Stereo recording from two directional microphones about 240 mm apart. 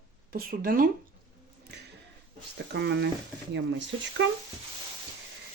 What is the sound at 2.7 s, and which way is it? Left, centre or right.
Speech, right.